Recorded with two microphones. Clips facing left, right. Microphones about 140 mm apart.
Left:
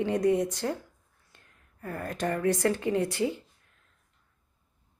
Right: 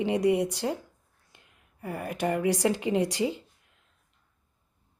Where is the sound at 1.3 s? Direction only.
15° right (ahead or behind).